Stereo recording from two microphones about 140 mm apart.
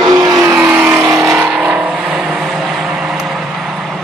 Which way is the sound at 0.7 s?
15° right (ahead or behind).